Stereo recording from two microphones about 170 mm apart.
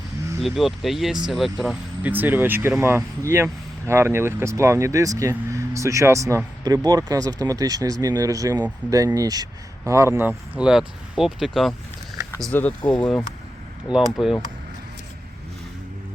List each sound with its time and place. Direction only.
0.4 s speech: centre (ahead or behind)
13.8 s speech: 5° right (ahead or behind)